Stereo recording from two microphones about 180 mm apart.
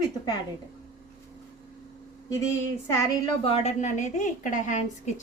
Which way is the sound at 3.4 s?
35° left (ahead or behind).